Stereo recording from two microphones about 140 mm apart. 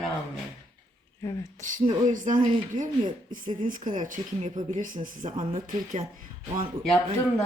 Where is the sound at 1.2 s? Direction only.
25° left (ahead or behind).